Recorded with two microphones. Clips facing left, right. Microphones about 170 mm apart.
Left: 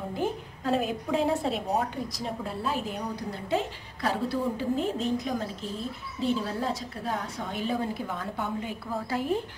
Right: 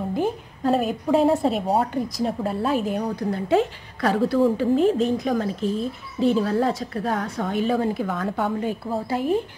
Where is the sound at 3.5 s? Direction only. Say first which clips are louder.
Right 8 dB; 75° right (ahead or behind); by 8.5 s 90° right.